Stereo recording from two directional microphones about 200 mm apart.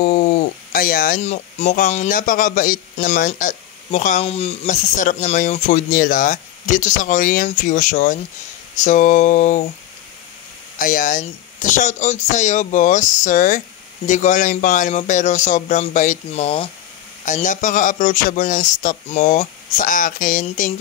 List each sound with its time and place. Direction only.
0.0 s speech: 40° left (ahead or behind)
10.8 s speech: 45° left (ahead or behind)